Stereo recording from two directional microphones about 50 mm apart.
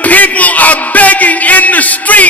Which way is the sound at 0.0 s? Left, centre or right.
Left.